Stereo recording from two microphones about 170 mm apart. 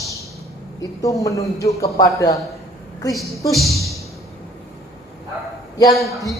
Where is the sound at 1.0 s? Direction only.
20° left (ahead or behind).